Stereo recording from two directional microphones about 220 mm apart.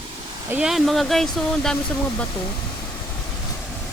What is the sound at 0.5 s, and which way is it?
Speech, 5° right (ahead or behind).